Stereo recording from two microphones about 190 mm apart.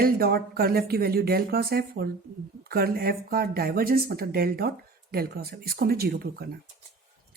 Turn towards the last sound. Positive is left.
turn(degrees=-55)  # may be behind; listen again after turning